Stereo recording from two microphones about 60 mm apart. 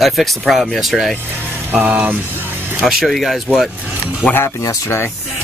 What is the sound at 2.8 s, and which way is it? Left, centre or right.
Speech, centre.